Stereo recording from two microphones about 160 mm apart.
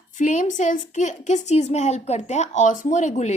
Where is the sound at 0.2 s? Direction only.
50° left (ahead or behind).